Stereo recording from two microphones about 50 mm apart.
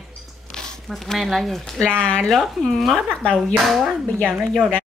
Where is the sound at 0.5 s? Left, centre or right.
Centre.